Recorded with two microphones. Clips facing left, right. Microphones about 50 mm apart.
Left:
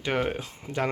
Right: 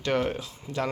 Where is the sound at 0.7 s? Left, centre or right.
Left.